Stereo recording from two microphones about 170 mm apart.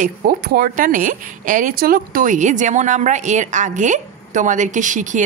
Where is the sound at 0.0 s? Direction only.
60° right (ahead or behind).